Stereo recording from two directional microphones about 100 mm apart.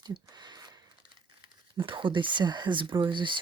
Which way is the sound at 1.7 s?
55° right (ahead or behind).